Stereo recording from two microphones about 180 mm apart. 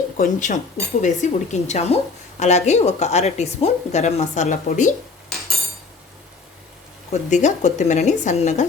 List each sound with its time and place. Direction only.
0.2 s speech: 45° left (ahead or behind)
7.1 s speech: 40° left (ahead or behind)